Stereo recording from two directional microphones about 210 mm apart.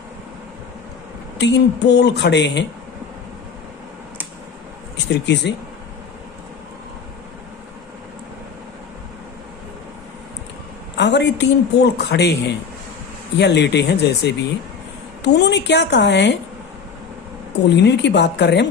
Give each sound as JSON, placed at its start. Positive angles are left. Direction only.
{"t": 1.4, "sound": "a woman's voice", "side_deg": 55}
{"t": 5.0, "sound": "a woman's voice", "side_deg": 55}
{"t": 10.9, "sound": "a woman's voice", "side_deg": 55}
{"t": 17.7, "sound": "a woman's voice", "side_deg": 55}